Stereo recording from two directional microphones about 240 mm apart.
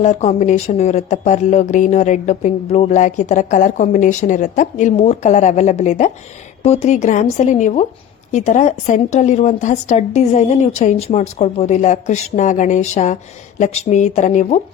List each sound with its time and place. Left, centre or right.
0.0 s a woman's voice: left